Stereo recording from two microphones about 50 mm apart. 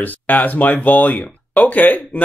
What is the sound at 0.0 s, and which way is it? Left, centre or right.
Speech, left.